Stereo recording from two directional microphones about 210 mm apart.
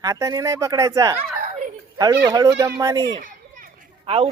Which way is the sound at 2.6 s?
15° right (ahead or behind).